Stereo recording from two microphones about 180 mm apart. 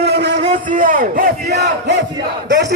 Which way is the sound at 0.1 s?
65° right (ahead or behind).